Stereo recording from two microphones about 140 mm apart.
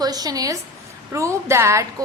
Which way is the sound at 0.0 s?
25° right (ahead or behind).